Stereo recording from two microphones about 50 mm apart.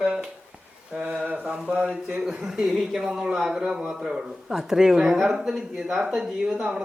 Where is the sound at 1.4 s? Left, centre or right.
Centre.